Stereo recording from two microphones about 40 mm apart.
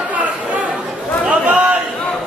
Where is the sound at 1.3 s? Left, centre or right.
Right.